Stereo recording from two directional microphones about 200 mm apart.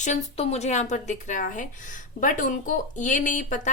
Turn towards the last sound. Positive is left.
turn(degrees=40)  # may be behind; listen again after turning